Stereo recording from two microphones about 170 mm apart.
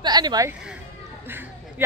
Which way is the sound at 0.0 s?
25° right (ahead or behind).